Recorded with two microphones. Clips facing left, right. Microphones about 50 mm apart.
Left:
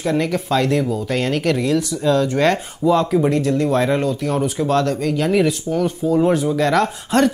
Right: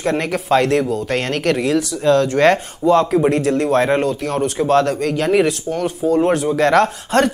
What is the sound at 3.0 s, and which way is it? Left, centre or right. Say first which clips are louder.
Speech: right 2 dB; right.